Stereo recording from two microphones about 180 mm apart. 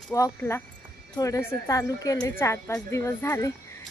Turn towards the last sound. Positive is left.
turn(degrees=15)  # may be behind; listen again after turning